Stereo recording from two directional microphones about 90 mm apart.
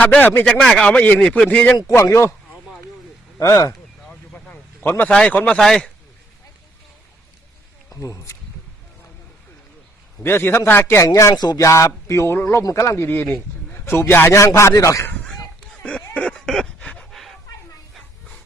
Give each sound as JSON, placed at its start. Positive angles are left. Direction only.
{"t": 0.0, "sound": "speech", "side_deg": 15}
{"t": 0.6, "sound": "a man's voice", "side_deg": 5}
{"t": 1.9, "sound": "speech", "side_deg": 35}
{"t": 3.3, "sound": "speech", "side_deg": 35}
{"t": 4.0, "sound": "vehicle", "side_deg": 10}
{"t": 4.8, "sound": "a man's voice", "side_deg": 20}
{"t": 7.9, "sound": "speech", "side_deg": 35}
{"t": 10.2, "sound": "speech", "side_deg": 25}
{"t": 11.3, "sound": "speech", "side_deg": 50}
{"t": 11.6, "sound": "speech", "side_deg": 35}
{"t": 15.8, "sound": "a sound", "side_deg": 10}